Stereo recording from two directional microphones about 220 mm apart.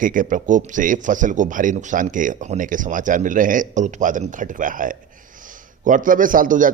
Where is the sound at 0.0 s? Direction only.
40° right (ahead or behind).